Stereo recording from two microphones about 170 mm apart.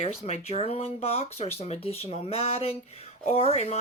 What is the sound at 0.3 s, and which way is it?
Speech, 35° left (ahead or behind).